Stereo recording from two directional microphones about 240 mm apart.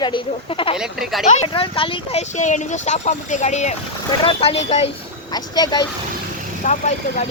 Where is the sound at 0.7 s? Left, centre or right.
Centre.